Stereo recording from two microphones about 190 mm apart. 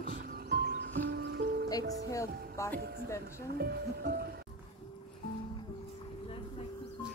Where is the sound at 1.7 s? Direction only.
20° left (ahead or behind).